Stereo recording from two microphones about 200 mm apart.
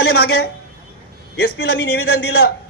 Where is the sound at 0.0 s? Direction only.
55° left (ahead or behind).